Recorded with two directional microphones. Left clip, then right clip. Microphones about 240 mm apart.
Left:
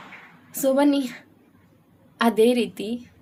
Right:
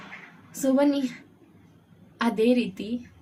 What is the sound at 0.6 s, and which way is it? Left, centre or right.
Speech, left.